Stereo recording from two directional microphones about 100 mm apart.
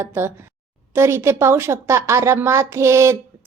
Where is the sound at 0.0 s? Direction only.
25° right (ahead or behind).